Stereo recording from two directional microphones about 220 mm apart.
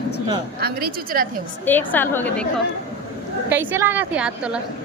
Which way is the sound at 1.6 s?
10° left (ahead or behind).